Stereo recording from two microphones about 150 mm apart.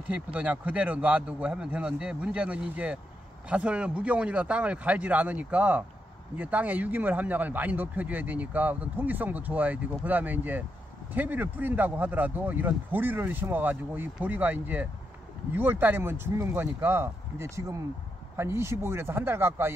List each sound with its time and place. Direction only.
0.1 s speech: 10° right (ahead or behind)